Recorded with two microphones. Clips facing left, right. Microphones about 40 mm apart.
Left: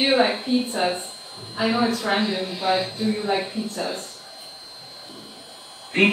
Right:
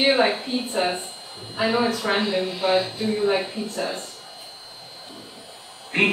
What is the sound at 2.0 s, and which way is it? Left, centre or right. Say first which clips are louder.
Speech: even; centre.